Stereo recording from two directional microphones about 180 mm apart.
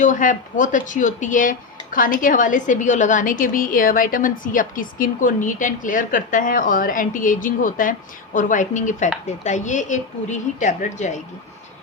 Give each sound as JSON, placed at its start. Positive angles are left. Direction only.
{"t": 0.0, "sound": "a woman's voice", "side_deg": 45}